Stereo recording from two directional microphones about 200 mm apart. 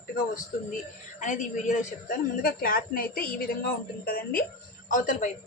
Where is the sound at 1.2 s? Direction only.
40° left (ahead or behind).